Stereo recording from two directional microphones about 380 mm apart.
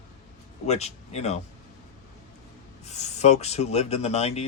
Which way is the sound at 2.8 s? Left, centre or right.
Centre.